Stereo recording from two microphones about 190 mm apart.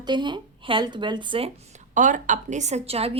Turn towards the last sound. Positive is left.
turn(degrees=-30)  # may be behind; listen again after turning